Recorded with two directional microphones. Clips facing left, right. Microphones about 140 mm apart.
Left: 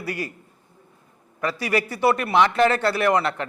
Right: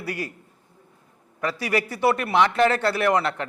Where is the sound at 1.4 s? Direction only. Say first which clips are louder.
Left 1 dB; 15° left (ahead or behind).